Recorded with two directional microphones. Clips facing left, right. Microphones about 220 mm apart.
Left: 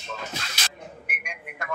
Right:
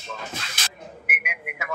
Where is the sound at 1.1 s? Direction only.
5° right (ahead or behind).